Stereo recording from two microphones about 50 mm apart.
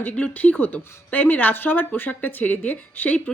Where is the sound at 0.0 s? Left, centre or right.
Left.